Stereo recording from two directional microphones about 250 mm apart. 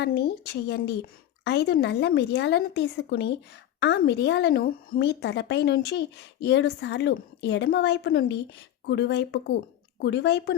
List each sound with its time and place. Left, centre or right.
0.0 s a woman's voice: left